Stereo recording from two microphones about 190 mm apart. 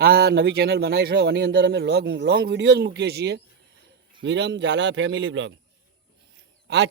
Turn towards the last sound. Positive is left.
turn(degrees=-65)  # may be behind; listen again after turning